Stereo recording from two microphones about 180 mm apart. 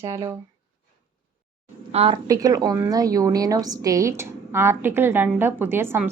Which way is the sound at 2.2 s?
20° right (ahead or behind).